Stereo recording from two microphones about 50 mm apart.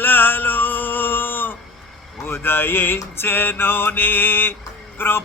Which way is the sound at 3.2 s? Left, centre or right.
Left.